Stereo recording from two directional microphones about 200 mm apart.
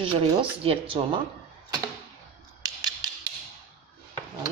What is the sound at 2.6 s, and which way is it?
Scissors, 20° right (ahead or behind).